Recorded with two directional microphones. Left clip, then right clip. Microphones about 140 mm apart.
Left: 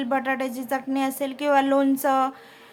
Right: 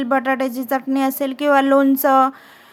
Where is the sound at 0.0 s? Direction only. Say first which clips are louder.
Right 6 dB; 40° right (ahead or behind).